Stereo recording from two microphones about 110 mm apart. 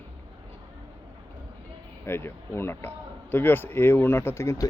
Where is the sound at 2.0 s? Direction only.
20° left (ahead or behind).